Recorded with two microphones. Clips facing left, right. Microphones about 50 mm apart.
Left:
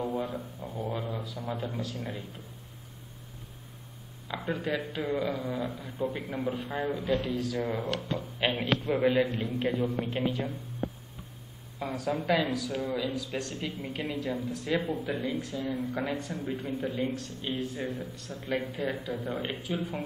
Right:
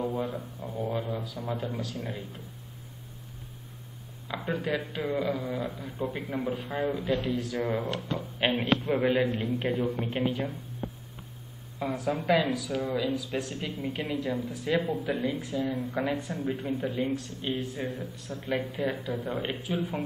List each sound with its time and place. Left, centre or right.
0.1 s speech: centre
4.3 s speech: centre
9.2 s a man's voice: right
9.9 s speech: centre
11.8 s speech: centre
12.1 s speech: centre